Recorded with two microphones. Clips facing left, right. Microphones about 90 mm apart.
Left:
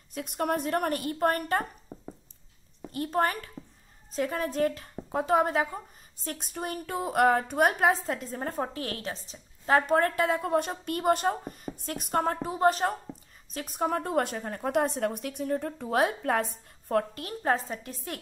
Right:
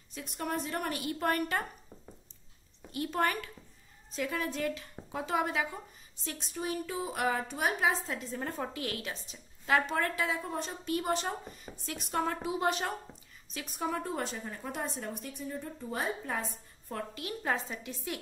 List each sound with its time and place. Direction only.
0.1 s a woman's voice: 55° left (ahead or behind)
2.9 s a woman's voice: 40° left (ahead or behind); by 16.4 s 65° left (ahead or behind)
16.9 s a woman's voice: 45° left (ahead or behind)